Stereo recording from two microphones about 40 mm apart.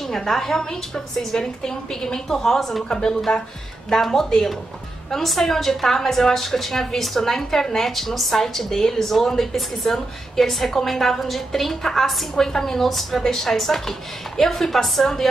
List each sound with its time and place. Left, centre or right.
0.0 s a woman's voice: centre
2.9 s a woman's voice: centre